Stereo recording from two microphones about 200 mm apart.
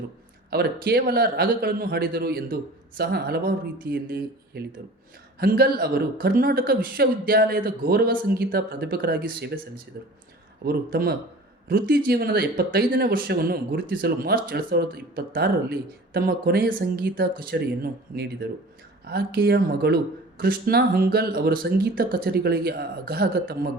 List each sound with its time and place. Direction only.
0.5 s speech: 50° right (ahead or behind)
19.0 s speech: 50° right (ahead or behind)